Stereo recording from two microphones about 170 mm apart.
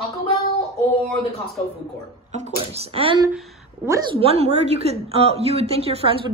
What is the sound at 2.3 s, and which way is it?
A woman's voice, 40° right (ahead or behind).